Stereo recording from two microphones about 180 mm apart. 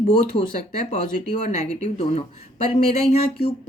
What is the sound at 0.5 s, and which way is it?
Speech, 45° left (ahead or behind).